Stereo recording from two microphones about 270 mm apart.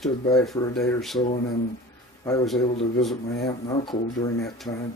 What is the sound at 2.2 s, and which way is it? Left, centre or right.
Speech, centre.